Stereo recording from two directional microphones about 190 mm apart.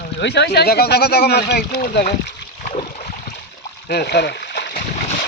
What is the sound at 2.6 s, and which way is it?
Boat, 40° left (ahead or behind).